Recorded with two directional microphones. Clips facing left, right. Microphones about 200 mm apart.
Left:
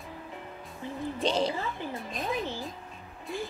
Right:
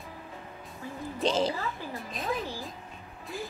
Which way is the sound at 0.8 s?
25° left (ahead or behind).